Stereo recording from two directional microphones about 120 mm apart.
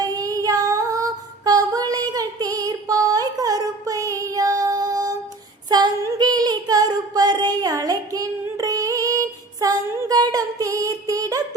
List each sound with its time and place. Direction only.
0.0 s child singing: 30° right (ahead or behind)
1.5 s female singing: 30° right (ahead or behind)
5.6 s singing: 35° right (ahead or behind)